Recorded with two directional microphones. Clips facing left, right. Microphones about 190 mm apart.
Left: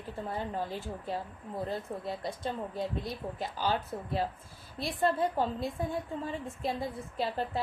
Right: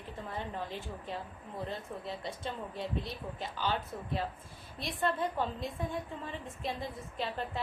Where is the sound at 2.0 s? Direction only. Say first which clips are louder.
Left 2 dB; 40° left (ahead or behind).